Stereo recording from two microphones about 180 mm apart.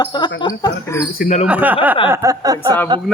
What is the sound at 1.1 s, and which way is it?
Speech, 55° left (ahead or behind).